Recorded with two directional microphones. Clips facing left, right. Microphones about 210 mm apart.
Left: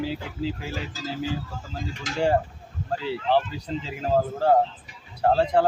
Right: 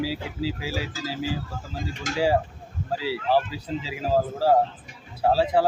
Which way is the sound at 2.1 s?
45° right (ahead or behind).